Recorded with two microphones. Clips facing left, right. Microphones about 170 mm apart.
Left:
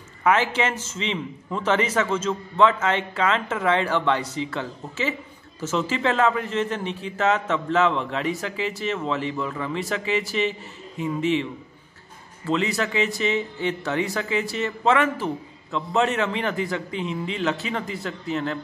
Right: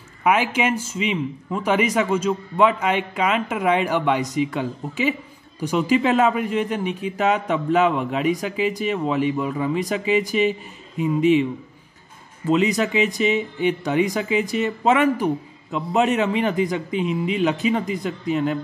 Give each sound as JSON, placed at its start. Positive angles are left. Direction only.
{"t": 0.2, "sound": "speech", "side_deg": -15}
{"t": 12.4, "sound": "speech", "side_deg": -15}